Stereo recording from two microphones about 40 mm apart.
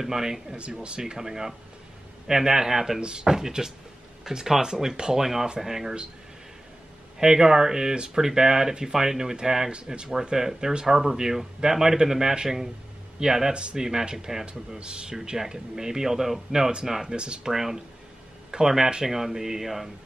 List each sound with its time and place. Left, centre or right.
0.0 s a man's voice: centre
3.0 s a man's voice: right
5.2 s a man's voice: centre
7.2 s a man's voice: centre
17.1 s speech: right
17.5 s a man's voice: centre